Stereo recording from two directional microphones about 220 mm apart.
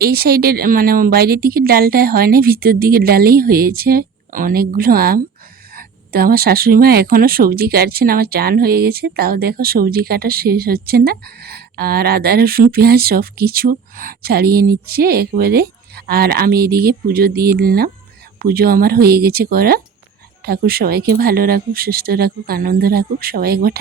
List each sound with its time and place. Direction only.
0.0 s speech: 45° right (ahead or behind)